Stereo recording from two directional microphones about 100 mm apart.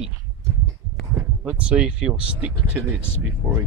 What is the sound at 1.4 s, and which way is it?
Speech, 10° right (ahead or behind).